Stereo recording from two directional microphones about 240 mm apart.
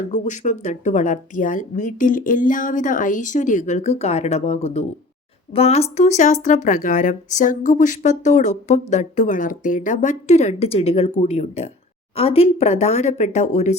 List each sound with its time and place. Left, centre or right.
0.1 s speech: left